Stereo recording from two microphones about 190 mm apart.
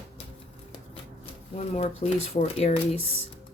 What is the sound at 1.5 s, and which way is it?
A woman's voice, 35° left (ahead or behind).